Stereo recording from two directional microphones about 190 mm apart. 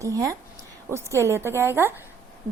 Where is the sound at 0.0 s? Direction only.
15° right (ahead or behind).